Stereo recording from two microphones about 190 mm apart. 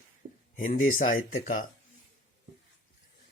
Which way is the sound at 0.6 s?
45° left (ahead or behind).